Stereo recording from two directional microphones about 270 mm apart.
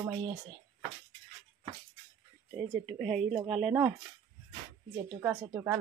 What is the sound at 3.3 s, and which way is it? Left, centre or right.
Speech, right.